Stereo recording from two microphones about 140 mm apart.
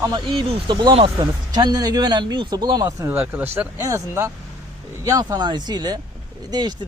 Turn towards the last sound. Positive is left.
turn(degrees=-30)  # may be behind; listen again after turning